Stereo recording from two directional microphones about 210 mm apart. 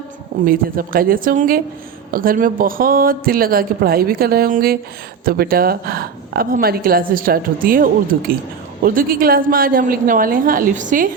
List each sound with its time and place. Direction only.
0.4 s speech: 45° right (ahead or behind)